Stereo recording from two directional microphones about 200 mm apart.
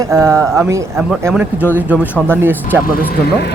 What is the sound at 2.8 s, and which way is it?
Speech, 45° left (ahead or behind).